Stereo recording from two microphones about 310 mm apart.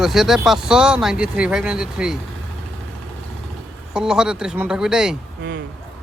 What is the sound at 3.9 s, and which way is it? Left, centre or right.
Speech, centre.